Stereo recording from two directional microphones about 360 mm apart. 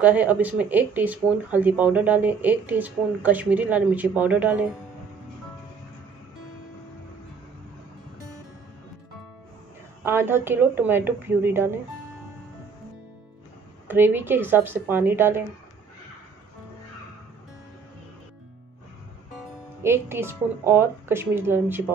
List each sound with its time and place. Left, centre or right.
0.0 s speech: centre
10.0 s a woman's voice: centre
13.8 s speech: centre
19.8 s a woman's voice: centre